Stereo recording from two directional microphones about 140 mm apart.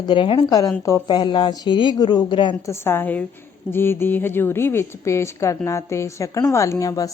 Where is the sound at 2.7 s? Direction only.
15° left (ahead or behind).